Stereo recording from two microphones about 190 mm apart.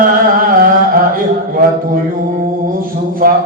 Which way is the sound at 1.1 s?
50° right (ahead or behind).